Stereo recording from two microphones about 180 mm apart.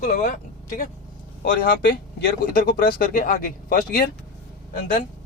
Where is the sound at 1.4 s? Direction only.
55° left (ahead or behind).